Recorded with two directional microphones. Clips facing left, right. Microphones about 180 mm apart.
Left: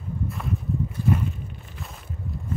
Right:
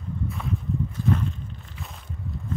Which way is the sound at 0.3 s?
Centre (ahead or behind).